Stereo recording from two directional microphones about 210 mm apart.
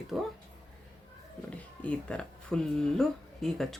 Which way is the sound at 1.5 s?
5° left (ahead or behind).